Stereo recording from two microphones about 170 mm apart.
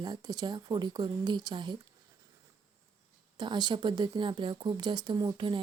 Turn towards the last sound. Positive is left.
turn(degrees=-30)  # may be behind; listen again after turning